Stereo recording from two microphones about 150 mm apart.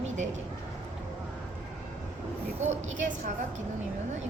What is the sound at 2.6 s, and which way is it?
Speech, 55° right (ahead or behind).